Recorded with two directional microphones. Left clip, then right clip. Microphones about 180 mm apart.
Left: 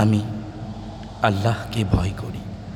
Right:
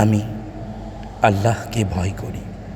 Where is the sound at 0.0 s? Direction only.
10° right (ahead or behind).